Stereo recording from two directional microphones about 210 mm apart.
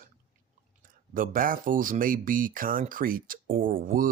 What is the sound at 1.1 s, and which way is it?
Speech, 40° right (ahead or behind).